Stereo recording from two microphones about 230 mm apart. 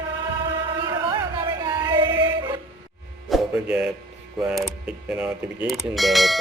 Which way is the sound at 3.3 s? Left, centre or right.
Centre.